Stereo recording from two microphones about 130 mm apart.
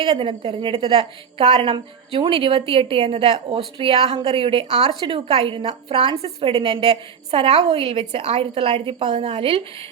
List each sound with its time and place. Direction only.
0.0 s a woman's voice: 40° right (ahead or behind)